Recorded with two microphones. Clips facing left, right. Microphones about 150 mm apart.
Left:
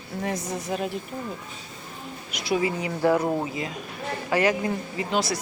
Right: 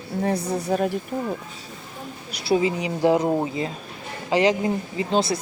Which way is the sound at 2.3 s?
30° right (ahead or behind).